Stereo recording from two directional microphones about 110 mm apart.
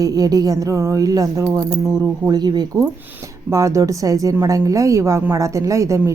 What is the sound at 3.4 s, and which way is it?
Speech, 25° right (ahead or behind).